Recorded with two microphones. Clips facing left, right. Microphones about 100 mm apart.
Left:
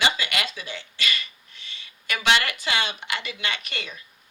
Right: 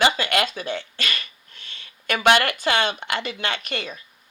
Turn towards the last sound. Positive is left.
turn(degrees=-45)  # may be behind; listen again after turning